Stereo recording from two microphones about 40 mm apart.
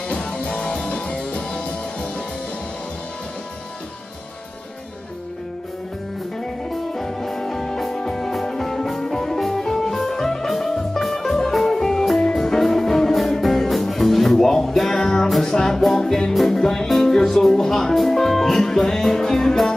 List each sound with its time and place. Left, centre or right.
0.1 s music: left
6.9 s music: centre